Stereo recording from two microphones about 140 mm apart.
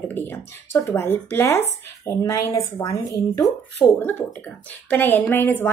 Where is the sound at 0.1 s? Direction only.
15° left (ahead or behind).